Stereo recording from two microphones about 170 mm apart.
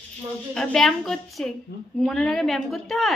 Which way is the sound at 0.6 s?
Centre (ahead or behind).